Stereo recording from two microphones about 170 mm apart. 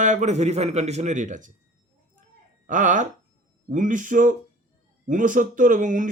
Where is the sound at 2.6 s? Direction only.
50° right (ahead or behind).